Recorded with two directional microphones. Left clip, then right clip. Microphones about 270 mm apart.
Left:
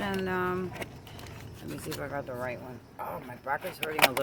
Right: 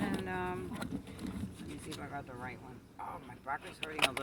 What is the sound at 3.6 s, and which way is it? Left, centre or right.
Speech, left.